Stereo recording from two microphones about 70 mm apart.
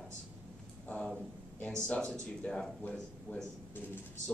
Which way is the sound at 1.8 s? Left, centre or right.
Centre.